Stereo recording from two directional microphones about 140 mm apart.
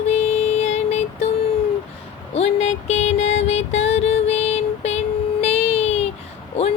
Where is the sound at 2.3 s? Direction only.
50° left (ahead or behind).